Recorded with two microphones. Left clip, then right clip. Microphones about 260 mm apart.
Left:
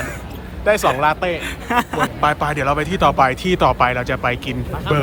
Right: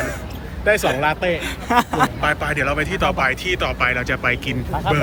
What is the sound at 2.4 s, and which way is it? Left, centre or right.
Speech, centre.